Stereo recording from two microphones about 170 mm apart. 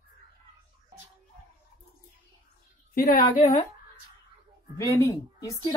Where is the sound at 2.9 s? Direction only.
60° left (ahead or behind).